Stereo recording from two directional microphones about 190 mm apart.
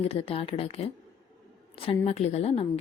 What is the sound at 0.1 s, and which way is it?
A woman's voice, 30° left (ahead or behind).